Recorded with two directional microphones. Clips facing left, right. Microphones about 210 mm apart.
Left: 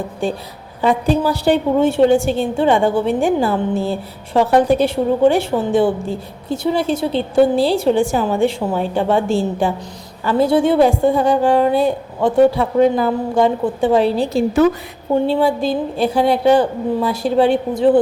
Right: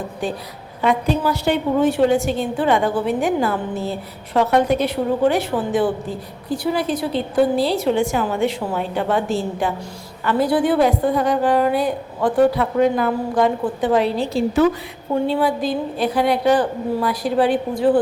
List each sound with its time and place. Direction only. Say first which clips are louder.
0.2 s a woman's voice: left 5 dB; 30° left (ahead or behind)
14.3 s a woman's voice: left 2 dB; 45° left (ahead or behind)
15.1 s a woman's voice: left 3 dB; 25° left (ahead or behind)